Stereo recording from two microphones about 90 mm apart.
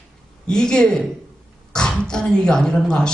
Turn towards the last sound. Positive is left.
turn(degrees=10)  # may be behind; listen again after turning